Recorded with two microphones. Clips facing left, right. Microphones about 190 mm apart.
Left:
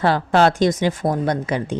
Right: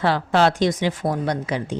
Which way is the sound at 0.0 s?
45° left (ahead or behind).